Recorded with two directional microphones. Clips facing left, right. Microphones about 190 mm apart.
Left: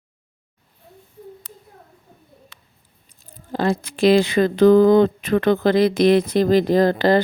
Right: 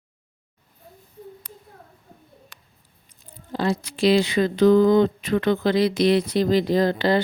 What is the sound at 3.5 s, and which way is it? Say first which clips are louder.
Speech: left 3 dB; 55° left (ahead or behind).